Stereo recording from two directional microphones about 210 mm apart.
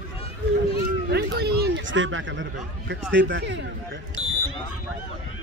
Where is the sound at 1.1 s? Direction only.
50° right (ahead or behind).